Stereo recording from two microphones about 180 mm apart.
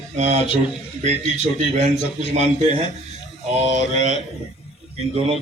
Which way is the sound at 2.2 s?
40° right (ahead or behind).